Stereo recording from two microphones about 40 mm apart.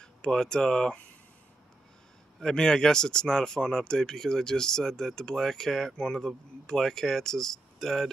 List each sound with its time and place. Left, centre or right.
0.0 s speech: centre
2.4 s speech: centre